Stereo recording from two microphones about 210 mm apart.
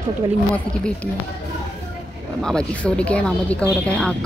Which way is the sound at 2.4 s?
5° left (ahead or behind).